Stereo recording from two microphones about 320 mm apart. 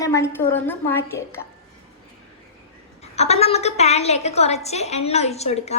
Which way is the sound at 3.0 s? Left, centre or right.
Centre.